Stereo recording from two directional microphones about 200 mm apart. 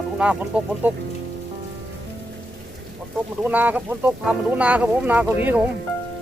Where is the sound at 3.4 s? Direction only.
10° right (ahead or behind).